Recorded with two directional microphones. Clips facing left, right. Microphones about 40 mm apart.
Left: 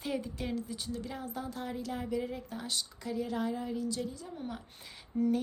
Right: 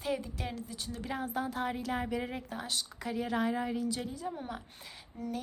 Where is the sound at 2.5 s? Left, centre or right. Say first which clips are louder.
Right 1 dB; centre.